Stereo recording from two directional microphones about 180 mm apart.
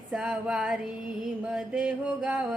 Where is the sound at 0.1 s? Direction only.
5° right (ahead or behind).